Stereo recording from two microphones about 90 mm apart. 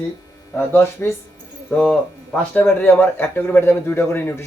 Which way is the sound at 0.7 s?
25° left (ahead or behind).